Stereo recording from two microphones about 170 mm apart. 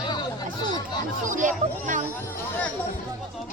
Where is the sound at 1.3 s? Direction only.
50° right (ahead or behind).